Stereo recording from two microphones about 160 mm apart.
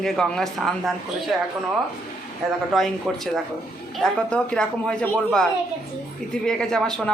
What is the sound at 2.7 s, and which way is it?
A woman's voice, centre (ahead or behind).